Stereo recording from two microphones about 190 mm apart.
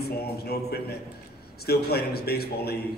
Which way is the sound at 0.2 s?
55° left (ahead or behind).